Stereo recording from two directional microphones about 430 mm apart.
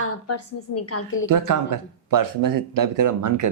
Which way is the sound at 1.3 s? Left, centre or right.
Right.